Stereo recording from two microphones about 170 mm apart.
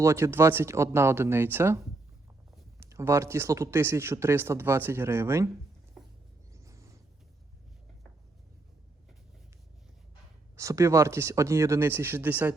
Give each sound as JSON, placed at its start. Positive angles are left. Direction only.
{"t": 0.0, "sound": "speech", "side_deg": -15}
{"t": 2.8, "sound": "speech", "side_deg": -15}
{"t": 6.5, "sound": "a sound", "side_deg": -20}
{"t": 10.6, "sound": "speech", "side_deg": -20}